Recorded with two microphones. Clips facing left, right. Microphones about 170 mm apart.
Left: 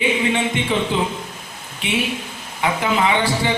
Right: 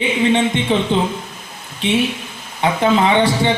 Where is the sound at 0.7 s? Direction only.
30° right (ahead or behind).